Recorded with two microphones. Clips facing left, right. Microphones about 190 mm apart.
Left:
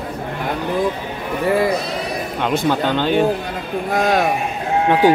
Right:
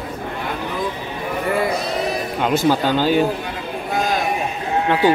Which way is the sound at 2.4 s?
5° right (ahead or behind).